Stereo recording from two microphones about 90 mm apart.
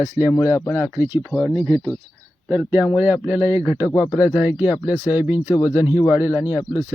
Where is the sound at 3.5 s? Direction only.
35° right (ahead or behind).